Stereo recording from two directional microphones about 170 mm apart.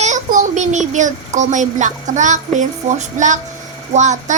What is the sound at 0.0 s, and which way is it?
A child's voice, 45° right (ahead or behind).